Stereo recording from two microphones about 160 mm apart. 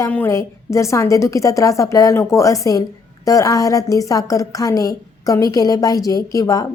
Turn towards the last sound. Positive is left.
turn(degrees=20)  # may be behind; listen again after turning